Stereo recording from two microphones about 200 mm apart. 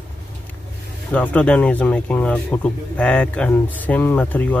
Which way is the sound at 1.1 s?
5° left (ahead or behind).